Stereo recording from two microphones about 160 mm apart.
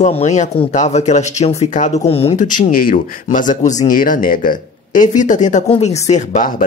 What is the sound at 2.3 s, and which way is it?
Speech, 55° left (ahead or behind).